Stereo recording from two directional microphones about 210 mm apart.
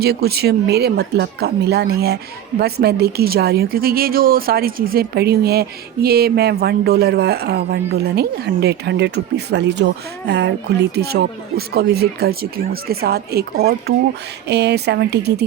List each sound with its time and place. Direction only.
0.0 s speech: 50° right (ahead or behind)